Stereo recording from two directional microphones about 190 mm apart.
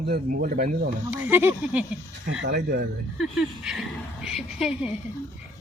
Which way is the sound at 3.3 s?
5° right (ahead or behind).